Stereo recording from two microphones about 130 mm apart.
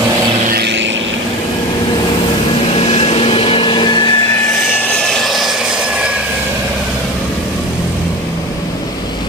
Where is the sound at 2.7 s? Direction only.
55° left (ahead or behind); by 4.3 s 35° left (ahead or behind).